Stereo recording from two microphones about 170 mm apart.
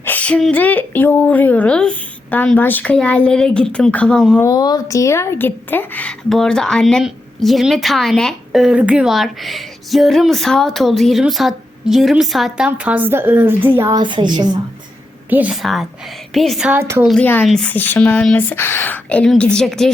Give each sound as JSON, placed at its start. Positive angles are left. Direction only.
{"t": 0.0, "sound": "a woman's voice", "side_deg": 10}
{"t": 4.4, "sound": "a woman's voice", "side_deg": 20}
{"t": 14.0, "sound": "a woman's voice", "side_deg": -25}
{"t": 15.3, "sound": "a woman's voice", "side_deg": -10}